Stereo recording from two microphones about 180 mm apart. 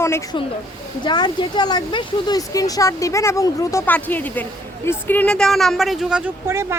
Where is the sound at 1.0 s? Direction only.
25° left (ahead or behind); by 6.3 s 5° right (ahead or behind).